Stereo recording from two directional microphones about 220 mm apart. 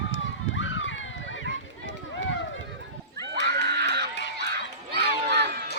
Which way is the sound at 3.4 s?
50° right (ahead or behind).